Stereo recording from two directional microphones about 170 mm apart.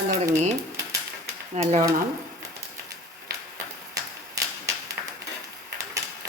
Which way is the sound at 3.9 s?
20° right (ahead or behind).